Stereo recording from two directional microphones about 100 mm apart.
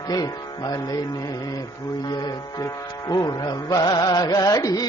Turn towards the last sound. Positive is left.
turn(degrees=35)  # may be behind; listen again after turning